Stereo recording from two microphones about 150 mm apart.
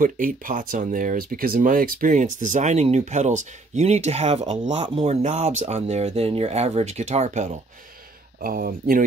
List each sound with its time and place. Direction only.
0.0 s speech: 65° right (ahead or behind)
8.4 s speech: 80° right